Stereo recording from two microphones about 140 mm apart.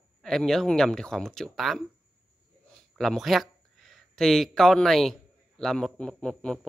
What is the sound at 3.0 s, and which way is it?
A man's voice, centre (ahead or behind).